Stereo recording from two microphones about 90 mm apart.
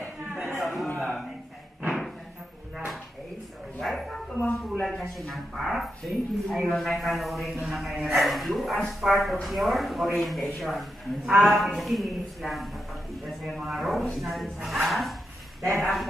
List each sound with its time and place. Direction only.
0.3 s a sound: centre (ahead or behind)
3.8 s bow-wow: centre (ahead or behind)
4.8 s speech: centre (ahead or behind)